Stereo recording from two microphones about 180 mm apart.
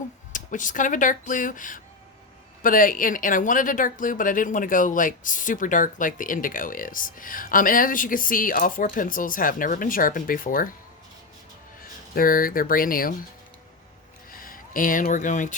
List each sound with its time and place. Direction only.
0.3 s speech: 45° left (ahead or behind)
12.1 s speech: 50° left (ahead or behind)
14.3 s speech: 50° left (ahead or behind)